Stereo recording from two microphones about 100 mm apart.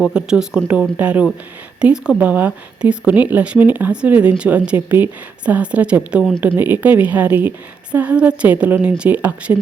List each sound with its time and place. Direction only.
0.0 s speech: 10° right (ahead or behind)